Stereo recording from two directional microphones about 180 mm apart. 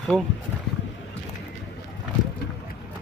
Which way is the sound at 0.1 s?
Centre (ahead or behind).